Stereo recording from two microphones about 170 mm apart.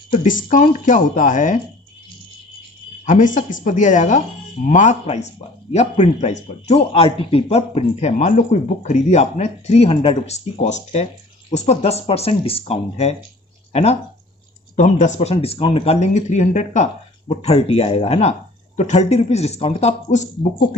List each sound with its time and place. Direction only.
0.2 s speech: 50° left (ahead or behind)
3.1 s speech: 50° left (ahead or behind)